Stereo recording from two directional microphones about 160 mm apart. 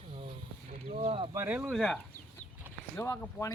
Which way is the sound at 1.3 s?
15° right (ahead or behind).